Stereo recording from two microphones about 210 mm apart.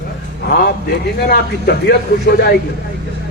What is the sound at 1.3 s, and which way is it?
A man's voice, 50° left (ahead or behind).